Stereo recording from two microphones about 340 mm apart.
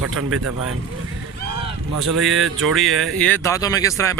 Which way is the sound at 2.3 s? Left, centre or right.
Centre.